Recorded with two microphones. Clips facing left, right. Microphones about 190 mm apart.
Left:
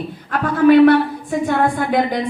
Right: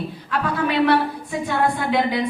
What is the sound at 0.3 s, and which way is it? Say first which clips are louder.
A woman's voice: left 10 dB; 50° left (ahead or behind).